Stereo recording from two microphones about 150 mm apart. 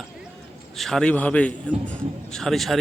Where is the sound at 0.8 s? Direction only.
Centre (ahead or behind).